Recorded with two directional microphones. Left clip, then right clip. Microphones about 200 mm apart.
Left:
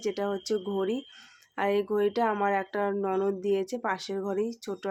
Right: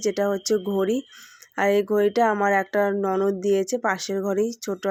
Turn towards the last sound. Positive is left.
turn(degrees=-20)  # may be behind; listen again after turning